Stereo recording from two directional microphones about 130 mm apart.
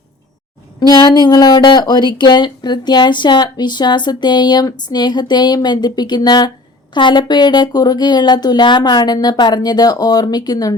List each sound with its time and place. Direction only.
0.8 s speech: 30° left (ahead or behind)